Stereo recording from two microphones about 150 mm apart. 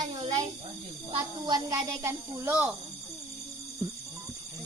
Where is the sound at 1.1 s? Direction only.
30° right (ahead or behind); by 2.7 s 10° right (ahead or behind).